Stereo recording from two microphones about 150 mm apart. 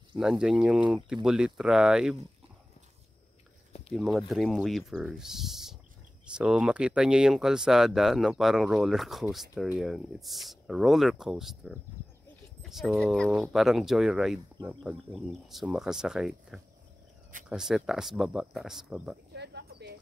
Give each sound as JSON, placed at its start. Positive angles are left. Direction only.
{"t": 0.2, "sound": "speech", "side_deg": -5}
{"t": 3.9, "sound": "speech", "side_deg": 0}
{"t": 19.3, "sound": "a sound", "side_deg": -90}